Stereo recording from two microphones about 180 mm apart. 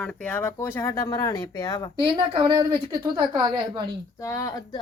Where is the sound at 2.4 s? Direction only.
25° right (ahead or behind).